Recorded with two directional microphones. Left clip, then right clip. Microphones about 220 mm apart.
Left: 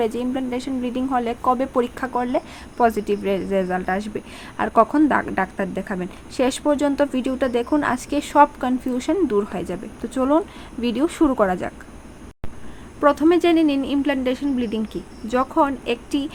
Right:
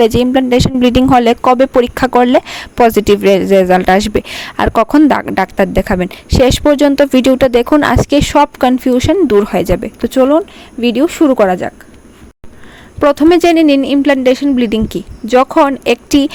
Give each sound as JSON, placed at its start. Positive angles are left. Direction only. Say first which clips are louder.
{"t": 0.0, "sound": "speech", "louder": "right 13 dB", "side_deg": -45}
{"t": 13.0, "sound": "speech", "louder": "right 8 dB", "side_deg": -40}